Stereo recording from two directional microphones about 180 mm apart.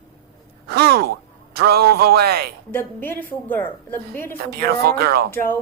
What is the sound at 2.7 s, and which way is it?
A woman's voice, 10° left (ahead or behind).